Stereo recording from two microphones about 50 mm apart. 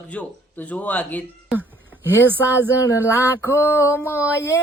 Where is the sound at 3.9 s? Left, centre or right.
Left.